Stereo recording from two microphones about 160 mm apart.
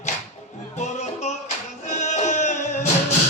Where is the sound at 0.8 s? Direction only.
45° left (ahead or behind).